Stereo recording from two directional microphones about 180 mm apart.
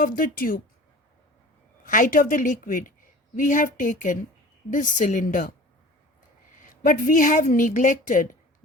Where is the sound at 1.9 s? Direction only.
45° left (ahead or behind).